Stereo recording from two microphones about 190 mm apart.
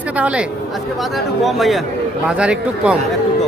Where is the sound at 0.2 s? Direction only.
5° right (ahead or behind).